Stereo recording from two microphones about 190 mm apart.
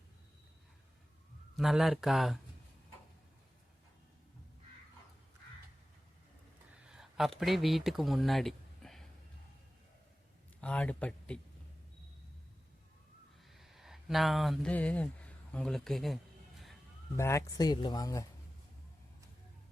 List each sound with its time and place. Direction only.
1.5 s speech: centre (ahead or behind)
6.7 s speech: 5° right (ahead or behind)
10.6 s speech: 5° left (ahead or behind)
13.5 s speech: centre (ahead or behind)
17.2 s speech: 15° left (ahead or behind)